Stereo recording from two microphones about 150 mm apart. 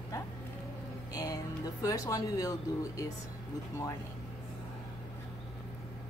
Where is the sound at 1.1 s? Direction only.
25° left (ahead or behind).